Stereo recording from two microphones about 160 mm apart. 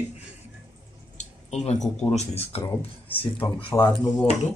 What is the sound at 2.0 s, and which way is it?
Speech, 40° left (ahead or behind).